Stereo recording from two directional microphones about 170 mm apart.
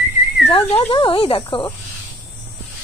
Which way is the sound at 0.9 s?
30° left (ahead or behind).